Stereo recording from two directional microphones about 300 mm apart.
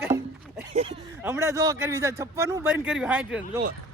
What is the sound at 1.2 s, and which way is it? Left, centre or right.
A man's voice, centre.